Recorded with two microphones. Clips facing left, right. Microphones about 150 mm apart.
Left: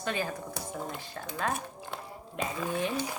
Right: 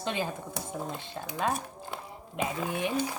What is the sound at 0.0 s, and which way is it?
Speech, 20° right (ahead or behind).